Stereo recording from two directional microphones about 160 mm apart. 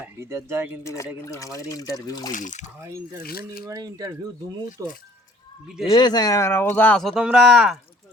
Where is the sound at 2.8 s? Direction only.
20° right (ahead or behind).